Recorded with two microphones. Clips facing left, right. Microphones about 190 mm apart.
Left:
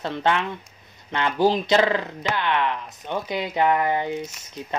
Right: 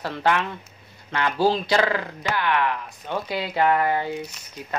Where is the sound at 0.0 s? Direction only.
20° left (ahead or behind).